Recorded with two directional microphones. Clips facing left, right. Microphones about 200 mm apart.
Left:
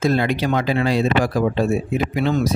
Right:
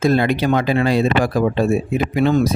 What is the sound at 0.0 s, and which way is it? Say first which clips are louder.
Speech: right 3 dB; 55° right (ahead or behind).